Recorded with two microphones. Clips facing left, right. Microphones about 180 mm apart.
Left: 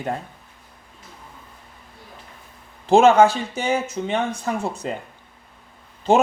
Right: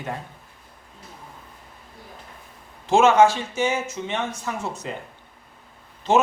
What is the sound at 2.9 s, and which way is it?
Speech, 35° left (ahead or behind).